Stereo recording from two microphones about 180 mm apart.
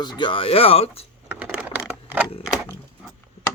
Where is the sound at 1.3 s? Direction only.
5° right (ahead or behind).